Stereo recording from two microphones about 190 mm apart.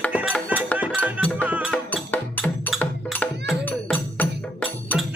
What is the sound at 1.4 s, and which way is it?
Music, 5° right (ahead or behind).